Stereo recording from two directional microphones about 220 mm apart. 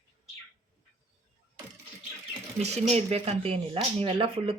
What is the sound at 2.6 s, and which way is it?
Speech, 30° right (ahead or behind).